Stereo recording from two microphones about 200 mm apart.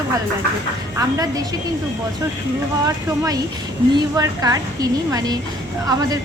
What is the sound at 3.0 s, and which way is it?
A woman's voice, 15° right (ahead or behind).